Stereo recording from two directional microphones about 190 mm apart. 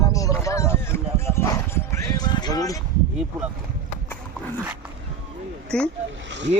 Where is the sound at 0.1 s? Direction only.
15° left (ahead or behind).